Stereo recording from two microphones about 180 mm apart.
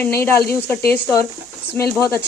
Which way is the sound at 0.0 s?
15° left (ahead or behind).